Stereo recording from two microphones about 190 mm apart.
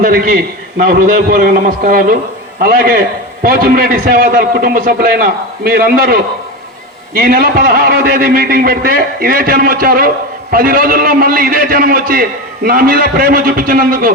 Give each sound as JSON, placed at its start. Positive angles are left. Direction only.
{"t": 0.0, "sound": "a man's voice", "side_deg": -50}